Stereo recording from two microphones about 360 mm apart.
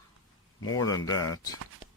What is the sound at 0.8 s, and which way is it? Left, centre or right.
Speech, centre.